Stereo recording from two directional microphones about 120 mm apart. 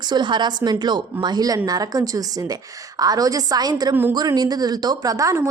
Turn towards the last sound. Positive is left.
turn(degrees=-30)  # may be behind; listen again after turning